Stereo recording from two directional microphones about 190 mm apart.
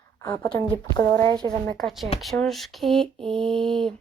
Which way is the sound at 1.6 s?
Centre (ahead or behind).